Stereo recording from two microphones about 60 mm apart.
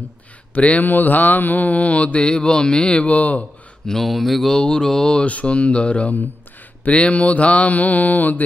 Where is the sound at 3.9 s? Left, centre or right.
Centre.